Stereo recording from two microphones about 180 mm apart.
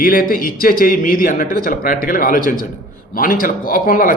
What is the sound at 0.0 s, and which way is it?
Speech, 50° left (ahead or behind).